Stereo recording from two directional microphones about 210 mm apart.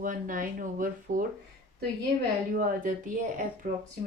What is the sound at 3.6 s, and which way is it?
Speech, 40° right (ahead or behind).